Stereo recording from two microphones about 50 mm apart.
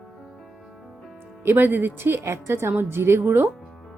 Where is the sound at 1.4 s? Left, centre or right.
Right.